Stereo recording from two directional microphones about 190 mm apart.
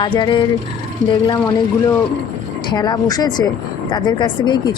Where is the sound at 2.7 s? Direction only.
20° left (ahead or behind).